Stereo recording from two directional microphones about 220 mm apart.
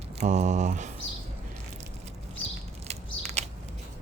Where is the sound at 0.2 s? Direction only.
35° right (ahead or behind).